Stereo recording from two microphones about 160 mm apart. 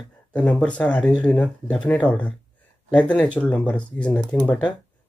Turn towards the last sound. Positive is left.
turn(degrees=10)  # may be behind; listen again after turning